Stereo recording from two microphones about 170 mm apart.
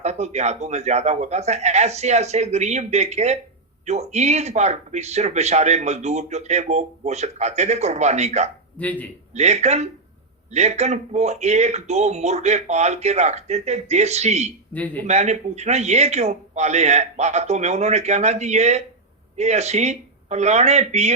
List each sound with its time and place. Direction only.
0.0 s speech: 40° right (ahead or behind)
8.8 s speech: 10° left (ahead or behind)
9.3 s speech: 40° right (ahead or behind)
14.7 s speech: 10° left (ahead or behind)
15.0 s speech: 40° right (ahead or behind)